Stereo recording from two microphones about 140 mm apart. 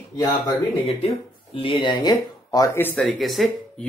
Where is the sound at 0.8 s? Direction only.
40° left (ahead or behind); by 3.0 s 15° left (ahead or behind).